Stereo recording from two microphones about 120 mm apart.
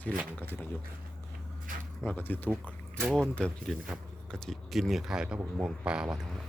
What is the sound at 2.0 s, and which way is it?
Speech, 15° left (ahead or behind).